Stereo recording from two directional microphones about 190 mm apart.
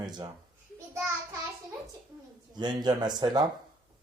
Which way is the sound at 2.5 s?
20° right (ahead or behind).